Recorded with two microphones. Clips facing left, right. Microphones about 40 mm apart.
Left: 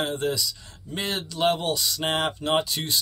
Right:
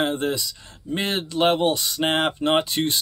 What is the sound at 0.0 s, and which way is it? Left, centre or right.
Speech, right.